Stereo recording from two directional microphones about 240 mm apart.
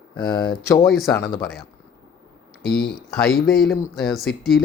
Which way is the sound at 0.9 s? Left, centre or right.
Centre.